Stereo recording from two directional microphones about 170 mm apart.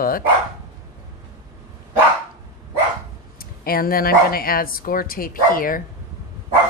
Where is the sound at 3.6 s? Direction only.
60° left (ahead or behind).